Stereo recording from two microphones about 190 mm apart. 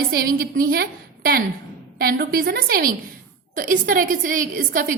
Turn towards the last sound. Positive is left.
turn(degrees=-45)  # may be behind; listen again after turning